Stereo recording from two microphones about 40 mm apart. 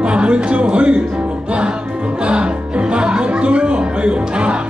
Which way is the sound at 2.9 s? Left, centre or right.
Right.